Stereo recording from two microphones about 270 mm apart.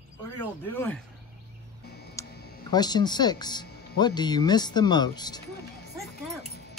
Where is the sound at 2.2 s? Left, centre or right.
Centre.